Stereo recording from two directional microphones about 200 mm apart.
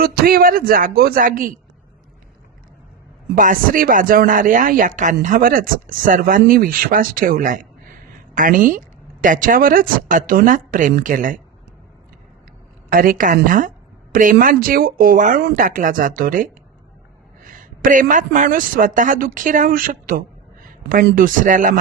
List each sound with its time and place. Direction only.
0.0 s a woman's voice: 50° right (ahead or behind)
3.3 s a woman's voice: 40° right (ahead or behind)
12.9 s a woman's voice: 45° right (ahead or behind)